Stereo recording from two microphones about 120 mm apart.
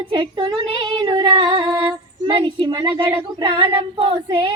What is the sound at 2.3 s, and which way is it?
Child singing, 45° right (ahead or behind).